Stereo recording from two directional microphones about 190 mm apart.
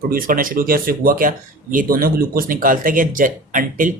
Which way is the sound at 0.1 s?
45° right (ahead or behind).